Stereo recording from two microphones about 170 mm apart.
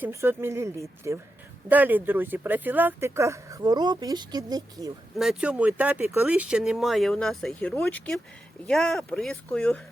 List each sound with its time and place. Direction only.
0.0 s speech: 15° right (ahead or behind)
5.1 s speech: 5° right (ahead or behind)